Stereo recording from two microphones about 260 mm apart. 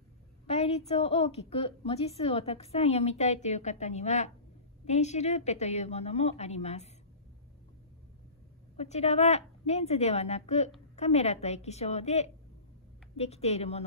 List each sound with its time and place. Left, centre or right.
0.5 s a woman's voice: left
8.7 s a woman's voice: left